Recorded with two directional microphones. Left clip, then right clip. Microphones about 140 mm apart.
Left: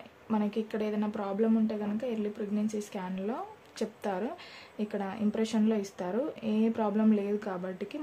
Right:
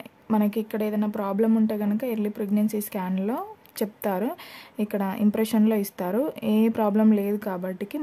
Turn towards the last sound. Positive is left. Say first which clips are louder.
# right 6 dB
turn(degrees=-55)  # may be behind; listen again after turning